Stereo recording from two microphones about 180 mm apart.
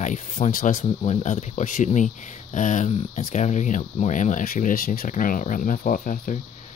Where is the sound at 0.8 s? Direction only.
35° left (ahead or behind).